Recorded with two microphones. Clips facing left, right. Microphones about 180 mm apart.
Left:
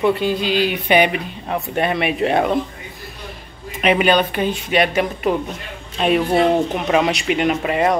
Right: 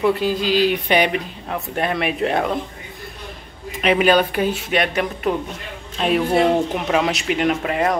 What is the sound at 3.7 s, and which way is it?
Speech, 5° left (ahead or behind).